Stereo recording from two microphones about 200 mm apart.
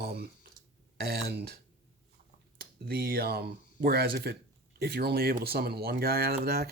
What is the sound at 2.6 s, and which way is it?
Speech, 50° right (ahead or behind).